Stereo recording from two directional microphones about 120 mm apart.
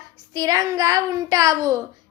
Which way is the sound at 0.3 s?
30° right (ahead or behind).